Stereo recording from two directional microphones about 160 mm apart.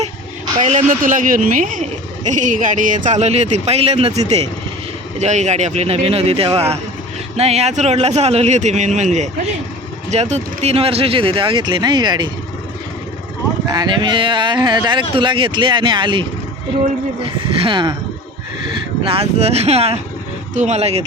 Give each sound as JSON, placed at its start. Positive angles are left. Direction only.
{"t": 0.6, "sound": "speech", "side_deg": -45}
{"t": 5.2, "sound": "speech", "side_deg": -45}
{"t": 13.7, "sound": "speech", "side_deg": -25}
{"t": 17.2, "sound": "speech", "side_deg": -35}
{"t": 19.0, "sound": "speech", "side_deg": -40}